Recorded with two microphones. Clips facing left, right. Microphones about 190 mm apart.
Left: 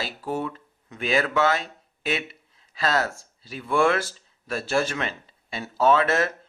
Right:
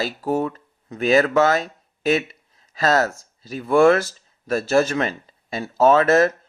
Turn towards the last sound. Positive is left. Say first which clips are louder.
# right 6 dB
turn(degrees=-40)  # may be behind; listen again after turning